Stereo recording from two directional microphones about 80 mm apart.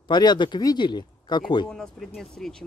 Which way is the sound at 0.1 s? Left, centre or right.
Left.